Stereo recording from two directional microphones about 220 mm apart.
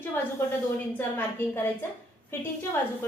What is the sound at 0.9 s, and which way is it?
Speech, 10° left (ahead or behind).